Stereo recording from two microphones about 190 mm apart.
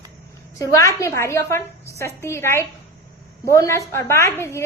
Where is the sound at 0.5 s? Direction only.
15° left (ahead or behind).